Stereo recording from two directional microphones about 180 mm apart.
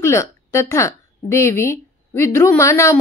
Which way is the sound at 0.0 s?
15° left (ahead or behind).